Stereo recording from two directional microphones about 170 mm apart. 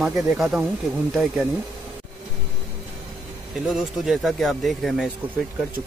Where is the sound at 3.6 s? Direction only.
5° right (ahead or behind).